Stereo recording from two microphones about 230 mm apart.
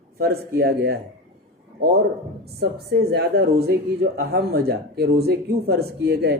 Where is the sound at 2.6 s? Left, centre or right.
Right.